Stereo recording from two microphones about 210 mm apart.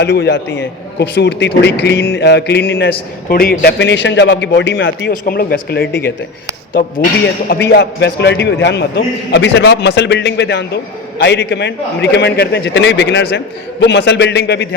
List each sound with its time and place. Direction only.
0.0 s a man's voice: 55° left (ahead or behind)
3.2 s a man's voice: 45° left (ahead or behind); by 5.1 s 60° left (ahead or behind)
5.3 s a man's voice: 50° left (ahead or behind)